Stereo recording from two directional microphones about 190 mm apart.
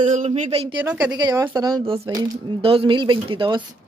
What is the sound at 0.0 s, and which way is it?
Speech, 35° right (ahead or behind).